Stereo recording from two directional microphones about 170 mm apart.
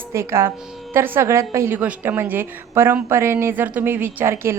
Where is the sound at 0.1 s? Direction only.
15° right (ahead or behind).